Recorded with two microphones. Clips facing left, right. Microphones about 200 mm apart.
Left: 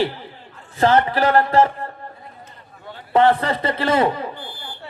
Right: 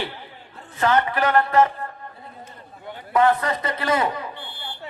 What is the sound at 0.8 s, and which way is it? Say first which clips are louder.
A man's voice: left 4 dB; 30° left (ahead or behind).